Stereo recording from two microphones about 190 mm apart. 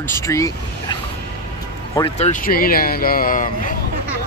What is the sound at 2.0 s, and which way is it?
Speech, 40° left (ahead or behind).